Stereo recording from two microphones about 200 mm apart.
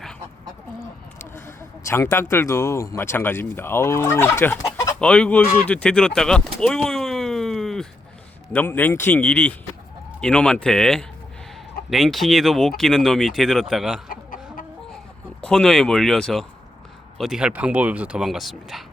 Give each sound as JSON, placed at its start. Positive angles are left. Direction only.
{"t": 1.2, "sound": "speech", "side_deg": 15}
{"t": 5.5, "sound": "bird", "side_deg": 5}
{"t": 8.5, "sound": "speech", "side_deg": 10}
{"t": 14.1, "sound": "chicken", "side_deg": 45}
{"t": 15.4, "sound": "speech", "side_deg": 5}